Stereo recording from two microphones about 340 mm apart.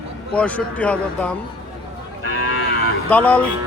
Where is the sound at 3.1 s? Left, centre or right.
Centre.